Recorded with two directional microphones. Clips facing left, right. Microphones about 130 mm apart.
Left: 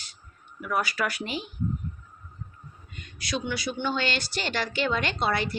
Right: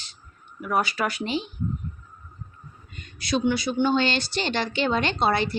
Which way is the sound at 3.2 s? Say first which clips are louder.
Right 7 dB; 30° right (ahead or behind).